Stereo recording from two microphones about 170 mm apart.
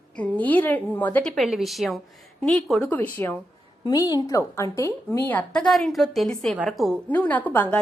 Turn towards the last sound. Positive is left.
turn(degrees=10)  # may be behind; listen again after turning